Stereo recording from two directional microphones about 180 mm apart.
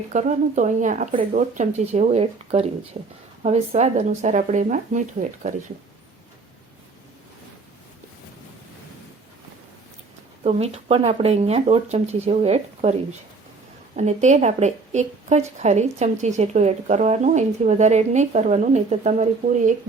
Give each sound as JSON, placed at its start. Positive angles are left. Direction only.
{"t": 0.1, "sound": "speech", "side_deg": -45}
{"t": 10.4, "sound": "speech", "side_deg": -35}